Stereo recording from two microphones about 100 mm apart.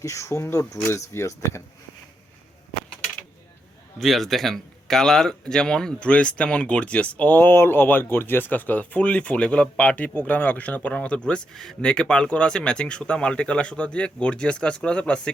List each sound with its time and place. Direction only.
0.0 s speech: 30° left (ahead or behind)
3.9 s speech: centre (ahead or behind)